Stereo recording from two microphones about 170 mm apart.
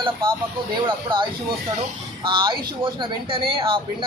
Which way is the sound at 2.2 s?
30° right (ahead or behind).